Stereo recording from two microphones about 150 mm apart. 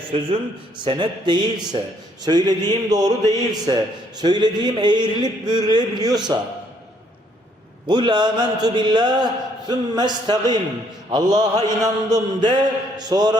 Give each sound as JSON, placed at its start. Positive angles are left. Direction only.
{"t": 0.1, "sound": "speech", "side_deg": -40}
{"t": 2.2, "sound": "mantra", "side_deg": -25}
{"t": 7.9, "sound": "mantra", "side_deg": -30}